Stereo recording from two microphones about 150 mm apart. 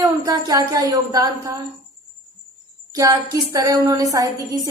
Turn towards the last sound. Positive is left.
turn(degrees=-25)  # may be behind; listen again after turning